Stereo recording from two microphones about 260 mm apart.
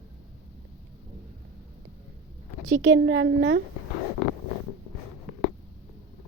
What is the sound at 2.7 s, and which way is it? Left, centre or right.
Speech, right.